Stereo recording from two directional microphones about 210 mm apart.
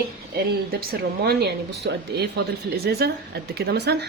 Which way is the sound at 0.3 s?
45° right (ahead or behind).